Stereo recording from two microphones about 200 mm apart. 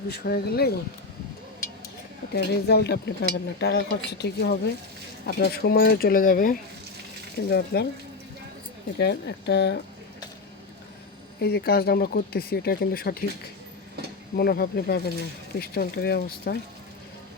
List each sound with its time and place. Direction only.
0.1 s speech: 50° left (ahead or behind)
2.3 s speech: 55° left (ahead or behind)
9.0 s speech: 55° left (ahead or behind)
11.3 s speech: 55° left (ahead or behind)
14.3 s speech: 50° left (ahead or behind)